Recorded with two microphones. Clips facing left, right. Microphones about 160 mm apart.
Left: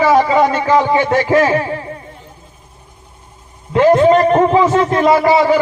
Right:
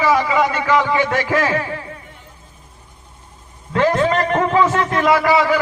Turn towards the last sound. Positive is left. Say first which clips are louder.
# left 4 dB
turn(degrees=25)  # may be behind; listen again after turning